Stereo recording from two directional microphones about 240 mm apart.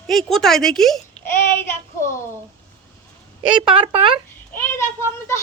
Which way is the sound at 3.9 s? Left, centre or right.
Right.